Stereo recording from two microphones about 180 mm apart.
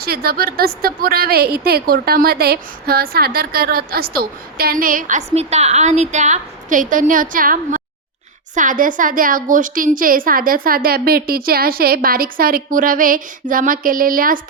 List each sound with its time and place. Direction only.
0.0 s a woman's voice: 60° right (ahead or behind)